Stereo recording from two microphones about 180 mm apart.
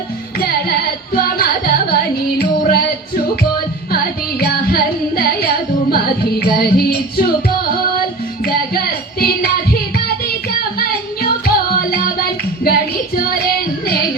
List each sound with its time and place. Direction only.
0.3 s music: 60° left (ahead or behind)
8.4 s child singing: 60° left (ahead or behind)
10.6 s music: 55° left (ahead or behind)